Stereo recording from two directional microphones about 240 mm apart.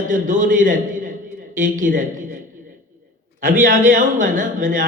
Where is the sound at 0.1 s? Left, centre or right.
Right.